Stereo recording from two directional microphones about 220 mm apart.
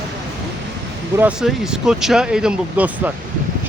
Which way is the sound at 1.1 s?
5° right (ahead or behind).